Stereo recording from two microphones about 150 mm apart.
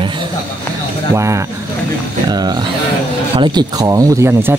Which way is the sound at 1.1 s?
20° right (ahead or behind).